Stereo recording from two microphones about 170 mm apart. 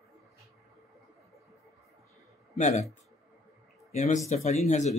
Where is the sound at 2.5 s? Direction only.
45° left (ahead or behind).